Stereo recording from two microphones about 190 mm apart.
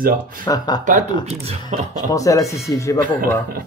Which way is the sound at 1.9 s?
15° left (ahead or behind).